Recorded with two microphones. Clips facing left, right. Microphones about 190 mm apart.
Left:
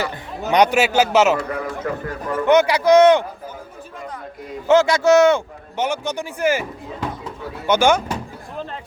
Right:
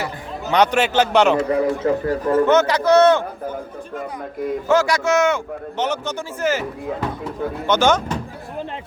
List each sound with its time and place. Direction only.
0.5 s speech: 10° left (ahead or behind)
1.4 s a man's voice: 30° right (ahead or behind)
2.5 s speech: 10° left (ahead or behind)
4.7 s a man's voice: 25° left (ahead or behind)
5.7 s speech: 10° left (ahead or behind)
7.7 s speech: 10° left (ahead or behind)